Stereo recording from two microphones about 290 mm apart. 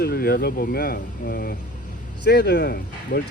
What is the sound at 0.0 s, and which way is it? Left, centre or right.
Speech, left.